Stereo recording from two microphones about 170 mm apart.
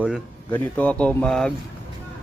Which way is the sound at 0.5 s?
10° left (ahead or behind).